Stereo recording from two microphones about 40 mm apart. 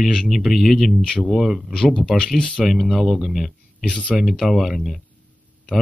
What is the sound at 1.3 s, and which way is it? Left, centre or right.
Speech, centre.